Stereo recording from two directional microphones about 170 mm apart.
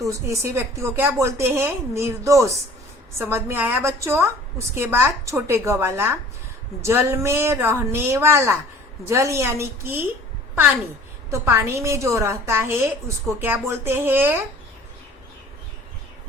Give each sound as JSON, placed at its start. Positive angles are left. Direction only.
{"t": 0.0, "sound": "a woman's voice", "side_deg": -20}
{"t": 11.3, "sound": "a woman's voice", "side_deg": -15}